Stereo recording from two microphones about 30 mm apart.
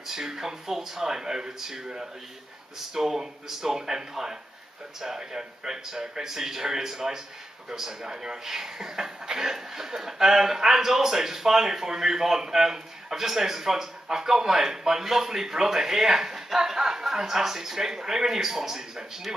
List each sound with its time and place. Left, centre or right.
0.0 s speech: centre
2.9 s speech: centre